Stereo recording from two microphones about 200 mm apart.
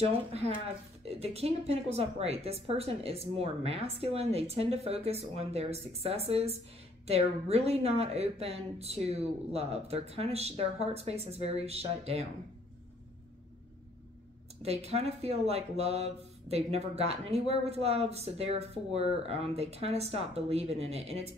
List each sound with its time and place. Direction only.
0.3 s a woman's voice: 30° right (ahead or behind)
14.6 s a woman's voice: 30° right (ahead or behind)